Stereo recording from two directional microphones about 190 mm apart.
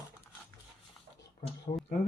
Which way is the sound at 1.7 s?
40° left (ahead or behind).